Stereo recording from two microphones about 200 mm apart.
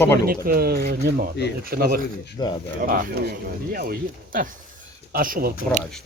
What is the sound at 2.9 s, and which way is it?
Speech, 45° right (ahead or behind).